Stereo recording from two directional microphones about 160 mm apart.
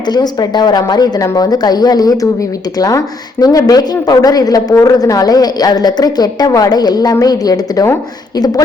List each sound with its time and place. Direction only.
0.1 s speech: 25° left (ahead or behind)